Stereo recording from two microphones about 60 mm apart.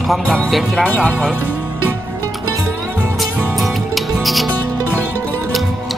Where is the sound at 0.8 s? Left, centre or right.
Left.